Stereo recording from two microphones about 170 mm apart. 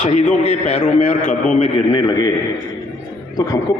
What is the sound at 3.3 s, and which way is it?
Speech, 20° left (ahead or behind).